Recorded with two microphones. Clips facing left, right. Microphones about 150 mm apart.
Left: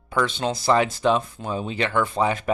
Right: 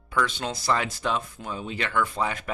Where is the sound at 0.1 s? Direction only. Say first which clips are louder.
Left 4 dB; 30° left (ahead or behind).